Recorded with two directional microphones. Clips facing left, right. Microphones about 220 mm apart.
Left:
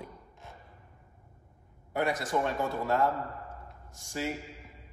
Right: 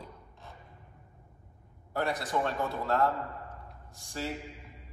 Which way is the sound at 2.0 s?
Centre (ahead or behind).